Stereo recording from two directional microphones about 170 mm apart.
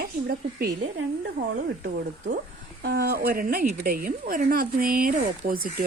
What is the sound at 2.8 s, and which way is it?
Speech, 70° right (ahead or behind).